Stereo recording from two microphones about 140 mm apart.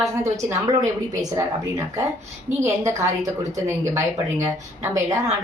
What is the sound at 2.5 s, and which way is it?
Speech, 20° right (ahead or behind).